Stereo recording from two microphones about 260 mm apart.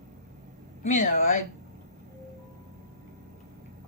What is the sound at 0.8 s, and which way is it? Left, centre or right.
Speech, left.